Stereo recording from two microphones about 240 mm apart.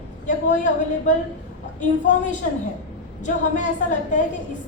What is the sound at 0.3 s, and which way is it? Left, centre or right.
Speech, left.